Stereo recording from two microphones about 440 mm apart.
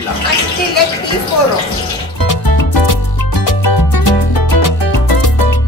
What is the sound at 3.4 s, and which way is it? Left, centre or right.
Music, left.